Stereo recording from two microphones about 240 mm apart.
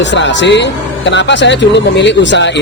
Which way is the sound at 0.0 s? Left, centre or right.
Left.